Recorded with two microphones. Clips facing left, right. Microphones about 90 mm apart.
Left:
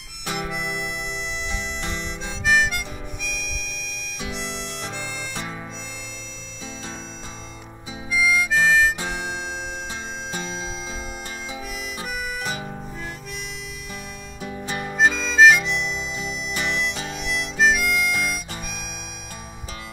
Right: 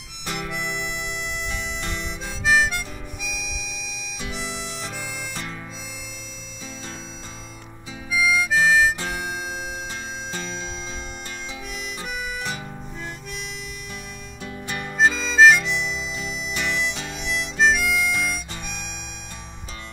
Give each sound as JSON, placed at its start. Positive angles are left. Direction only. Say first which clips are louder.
{"t": 0.3, "sound": "harmonica", "louder": "left 1 dB", "side_deg": 5}
{"t": 8.1, "sound": "harmonica", "louder": "even", "side_deg": 0}
{"t": 10.3, "sound": "music", "louder": "left 2 dB", "side_deg": 5}
{"t": 12.0, "sound": "music", "louder": "left 1 dB", "side_deg": 10}
{"t": 14.8, "sound": "harmonica", "louder": "even", "side_deg": 5}